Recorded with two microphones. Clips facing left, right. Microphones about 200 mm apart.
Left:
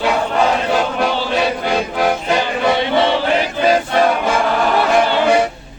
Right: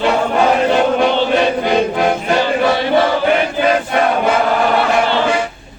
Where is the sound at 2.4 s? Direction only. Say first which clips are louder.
Right 2 dB; 20° left (ahead or behind).